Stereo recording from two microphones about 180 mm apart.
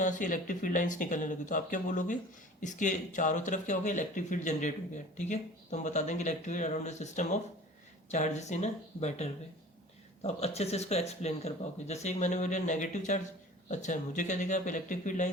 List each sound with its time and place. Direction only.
0.0 s speech: 45° left (ahead or behind)